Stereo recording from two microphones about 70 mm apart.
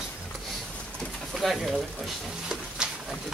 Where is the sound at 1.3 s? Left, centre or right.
Centre.